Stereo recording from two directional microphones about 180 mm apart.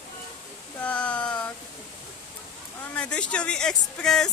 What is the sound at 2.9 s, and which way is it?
A woman's voice, 5° left (ahead or behind).